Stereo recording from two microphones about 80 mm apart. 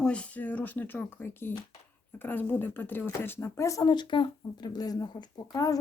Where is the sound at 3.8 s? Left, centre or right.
Left.